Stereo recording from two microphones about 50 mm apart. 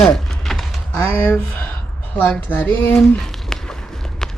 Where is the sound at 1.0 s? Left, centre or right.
Left.